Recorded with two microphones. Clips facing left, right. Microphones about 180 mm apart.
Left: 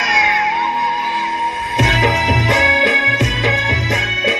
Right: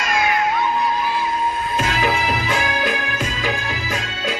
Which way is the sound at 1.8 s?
90° left.